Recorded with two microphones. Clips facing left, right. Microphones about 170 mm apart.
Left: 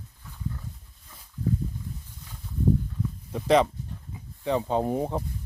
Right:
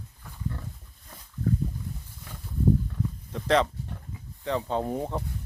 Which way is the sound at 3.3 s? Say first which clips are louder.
Left 3 dB; 10° left (ahead or behind).